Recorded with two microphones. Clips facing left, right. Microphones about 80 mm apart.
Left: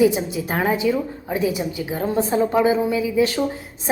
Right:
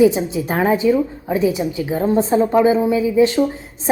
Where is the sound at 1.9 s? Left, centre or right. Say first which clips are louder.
Right 5 dB; right.